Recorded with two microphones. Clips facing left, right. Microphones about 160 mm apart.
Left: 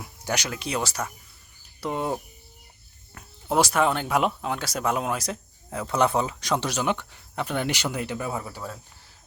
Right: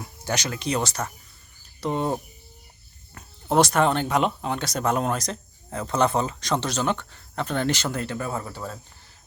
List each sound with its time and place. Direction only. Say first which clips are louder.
0.0 s speech: right 1 dB; 10° left (ahead or behind)
3.2 s speech: right 3 dB; 5° left (ahead or behind)